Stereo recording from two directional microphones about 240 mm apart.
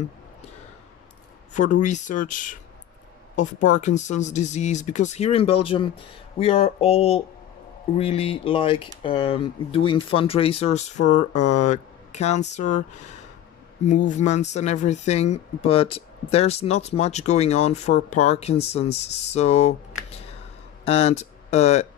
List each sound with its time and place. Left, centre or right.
1.5 s speech: left
13.8 s speech: left